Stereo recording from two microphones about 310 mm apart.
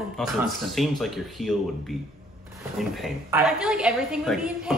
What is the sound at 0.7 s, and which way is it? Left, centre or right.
Speech, centre.